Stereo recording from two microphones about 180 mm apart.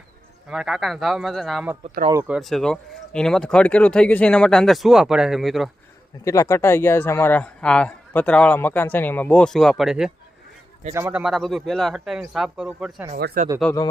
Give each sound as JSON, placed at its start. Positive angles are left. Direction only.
{"t": 0.5, "sound": "speech", "side_deg": 0}
{"t": 6.2, "sound": "speech", "side_deg": 15}
{"t": 10.9, "sound": "speech", "side_deg": -15}
{"t": 11.2, "sound": "speech", "side_deg": 0}
{"t": 13.1, "sound": "speech", "side_deg": -60}
{"t": 13.6, "sound": "speech", "side_deg": 5}